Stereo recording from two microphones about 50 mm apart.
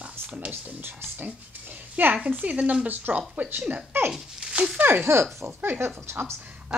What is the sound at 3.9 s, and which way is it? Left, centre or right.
Speech, right.